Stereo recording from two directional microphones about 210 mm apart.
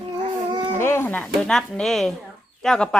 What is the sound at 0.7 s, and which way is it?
A woman's voice, 10° left (ahead or behind).